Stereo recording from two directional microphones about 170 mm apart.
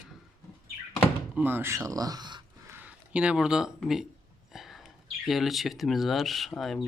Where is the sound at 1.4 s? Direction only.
10° right (ahead or behind).